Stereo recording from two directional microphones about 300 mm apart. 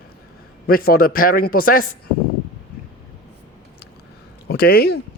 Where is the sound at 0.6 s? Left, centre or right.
Left.